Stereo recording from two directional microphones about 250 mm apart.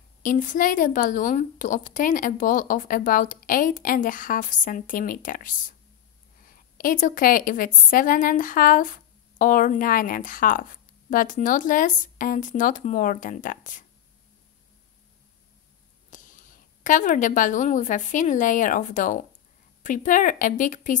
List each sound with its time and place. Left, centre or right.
0.2 s a woman's voice: left
6.8 s a woman's voice: left
16.1 s a woman's voice: left